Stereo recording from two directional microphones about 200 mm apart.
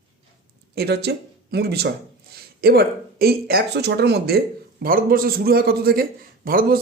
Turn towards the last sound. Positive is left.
turn(degrees=-45)  # may be behind; listen again after turning